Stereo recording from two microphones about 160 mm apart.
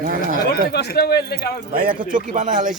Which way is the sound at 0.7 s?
90° left.